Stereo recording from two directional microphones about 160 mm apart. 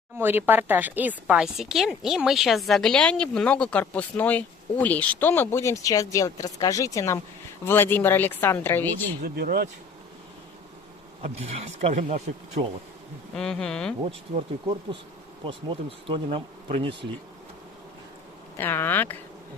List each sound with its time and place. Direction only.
0.2 s speech: 15° right (ahead or behind); by 9.1 s 10° left (ahead or behind)
9.2 s speech: 85° right
11.2 s speech: 40° right (ahead or behind)
13.3 s speech: 5° left (ahead or behind)
15.4 s speech: 30° right (ahead or behind)
18.5 s speech: 15° left (ahead or behind)